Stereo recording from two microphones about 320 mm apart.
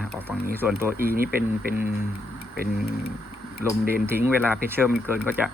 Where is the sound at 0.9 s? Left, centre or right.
Right.